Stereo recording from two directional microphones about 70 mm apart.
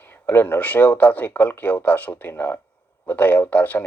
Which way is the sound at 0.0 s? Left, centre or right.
Left.